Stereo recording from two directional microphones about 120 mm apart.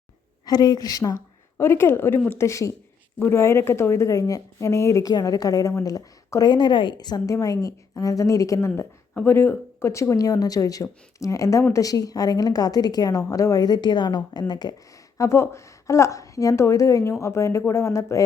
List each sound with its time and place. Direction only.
0.4 s a woman's voice: 35° left (ahead or behind)
15.2 s speech: 25° left (ahead or behind)